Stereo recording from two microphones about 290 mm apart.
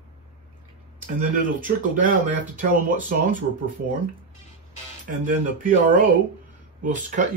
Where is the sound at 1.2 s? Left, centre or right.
Right.